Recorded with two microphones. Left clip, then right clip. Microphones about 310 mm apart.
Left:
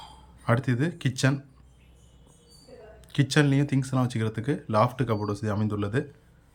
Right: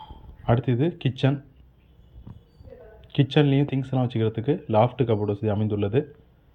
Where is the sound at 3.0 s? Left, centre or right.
Centre.